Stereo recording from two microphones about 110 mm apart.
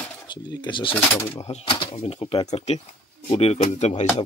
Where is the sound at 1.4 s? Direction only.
65° left (ahead or behind).